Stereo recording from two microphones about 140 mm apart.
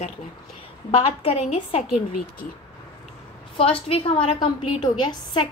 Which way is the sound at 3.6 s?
40° left (ahead or behind).